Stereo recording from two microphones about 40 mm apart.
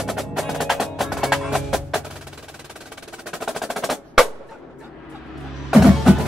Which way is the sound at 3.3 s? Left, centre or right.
Centre.